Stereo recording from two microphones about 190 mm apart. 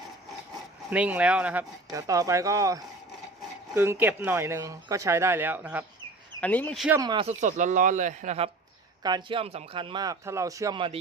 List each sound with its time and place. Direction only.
0.9 s speech: 5° right (ahead or behind)
1.9 s speech: 20° right (ahead or behind)
6.4 s speech: 10° left (ahead or behind)
7.0 s speech: 20° right (ahead or behind)
7.3 s speech: 40° right (ahead or behind)
9.0 s speech: 25° right (ahead or behind)